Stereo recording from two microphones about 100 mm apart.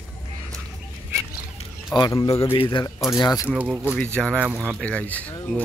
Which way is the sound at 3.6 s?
15° right (ahead or behind).